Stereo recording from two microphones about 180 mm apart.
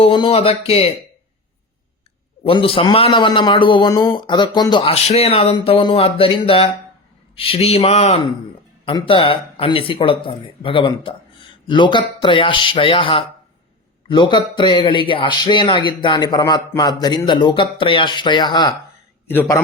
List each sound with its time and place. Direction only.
0.0 s speech: 30° left (ahead or behind)
2.5 s a man's voice: 30° left (ahead or behind)
19.3 s a man's voice: 10° left (ahead or behind)